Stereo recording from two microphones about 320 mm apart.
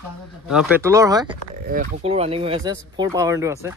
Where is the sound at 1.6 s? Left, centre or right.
Right.